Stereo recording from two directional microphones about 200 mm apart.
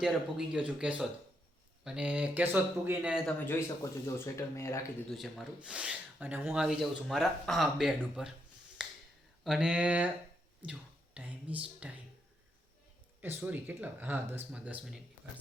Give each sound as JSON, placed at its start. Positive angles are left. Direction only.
{"t": 0.0, "sound": "speech", "side_deg": -5}
{"t": 4.0, "sound": "speech", "side_deg": 15}
{"t": 5.0, "sound": "speech", "side_deg": 0}
{"t": 8.8, "sound": "finger snapping", "side_deg": -5}
{"t": 9.4, "sound": "speech", "side_deg": -5}
{"t": 13.2, "sound": "speech", "side_deg": -10}